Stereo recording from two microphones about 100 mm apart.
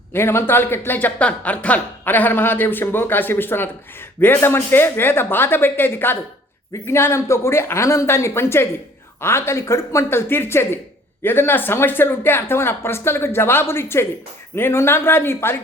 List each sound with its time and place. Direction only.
0.1 s speech: 25° left (ahead or behind)